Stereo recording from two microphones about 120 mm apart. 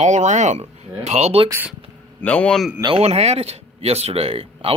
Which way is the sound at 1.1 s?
65° right (ahead or behind).